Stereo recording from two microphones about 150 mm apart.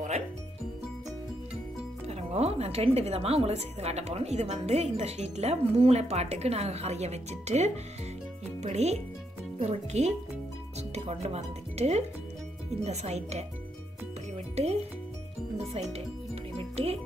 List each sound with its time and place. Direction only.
2.0 s speech: 45° right (ahead or behind)
14.3 s music: 45° right (ahead or behind)